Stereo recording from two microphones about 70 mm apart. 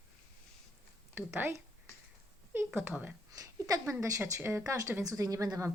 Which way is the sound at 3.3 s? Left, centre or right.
Right.